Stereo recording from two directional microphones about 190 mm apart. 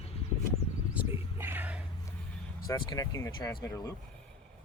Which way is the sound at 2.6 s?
20° left (ahead or behind).